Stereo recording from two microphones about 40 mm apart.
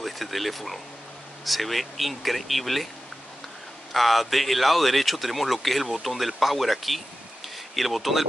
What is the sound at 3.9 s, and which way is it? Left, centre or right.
Speech, centre.